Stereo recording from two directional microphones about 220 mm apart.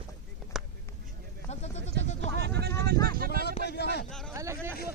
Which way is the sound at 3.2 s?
40° right (ahead or behind).